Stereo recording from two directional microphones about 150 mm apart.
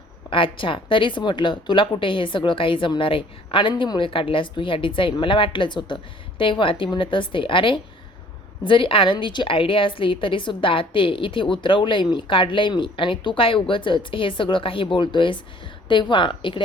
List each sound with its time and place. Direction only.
0.3 s speech: 35° left (ahead or behind)